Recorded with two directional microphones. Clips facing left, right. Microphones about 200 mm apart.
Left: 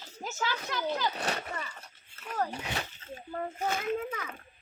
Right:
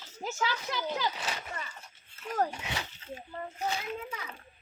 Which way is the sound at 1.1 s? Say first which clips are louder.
Left 4 dB; 60° left (ahead or behind).